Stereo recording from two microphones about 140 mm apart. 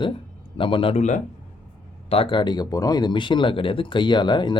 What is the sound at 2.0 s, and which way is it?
Speech, 45° left (ahead or behind).